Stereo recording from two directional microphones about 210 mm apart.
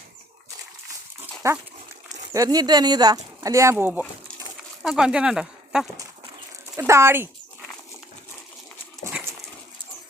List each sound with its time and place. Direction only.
1.4 s speech: 15° right (ahead or behind)
9.0 s dog: 10° right (ahead or behind)